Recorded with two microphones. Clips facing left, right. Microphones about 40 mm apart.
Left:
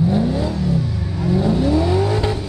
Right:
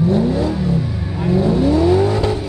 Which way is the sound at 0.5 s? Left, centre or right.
Centre.